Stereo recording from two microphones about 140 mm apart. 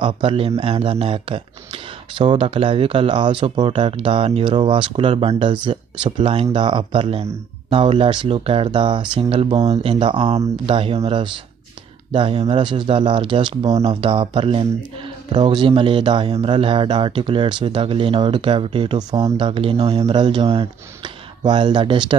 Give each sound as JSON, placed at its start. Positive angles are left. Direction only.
{"t": 0.0, "sound": "speech", "side_deg": -40}
{"t": 20.2, "sound": "speech", "side_deg": -35}